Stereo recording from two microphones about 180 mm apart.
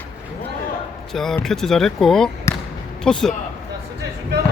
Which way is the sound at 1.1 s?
Centre (ahead or behind).